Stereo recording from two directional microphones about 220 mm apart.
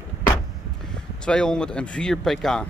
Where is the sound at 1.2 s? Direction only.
5° left (ahead or behind).